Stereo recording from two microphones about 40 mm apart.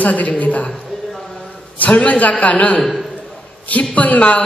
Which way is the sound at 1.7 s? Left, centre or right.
Left.